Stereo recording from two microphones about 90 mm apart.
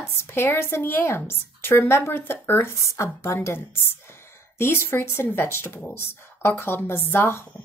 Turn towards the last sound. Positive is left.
turn(degrees=25)  # may be behind; listen again after turning